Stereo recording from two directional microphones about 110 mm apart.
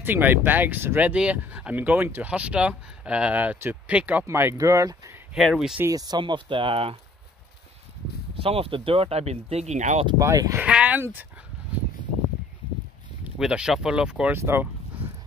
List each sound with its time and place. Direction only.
0.0 s speech: 20° right (ahead or behind)
4.3 s speech: 25° right (ahead or behind)
5.3 s speech: centre (ahead or behind)
5.9 s speech: 35° right (ahead or behind); by 7.0 s 55° right (ahead or behind)
8.4 s speech: 60° right (ahead or behind); by 10.0 s 90° right
10.2 s speech: 30° right (ahead or behind)
10.6 s speech: 10° right (ahead or behind)
13.4 s speech: 5° right (ahead or behind)
14.3 s speech: 20° right (ahead or behind)